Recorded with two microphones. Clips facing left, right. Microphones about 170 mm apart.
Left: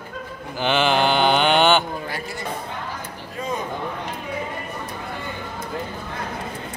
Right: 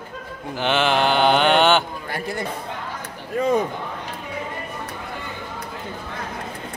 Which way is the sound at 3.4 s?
60° right (ahead or behind).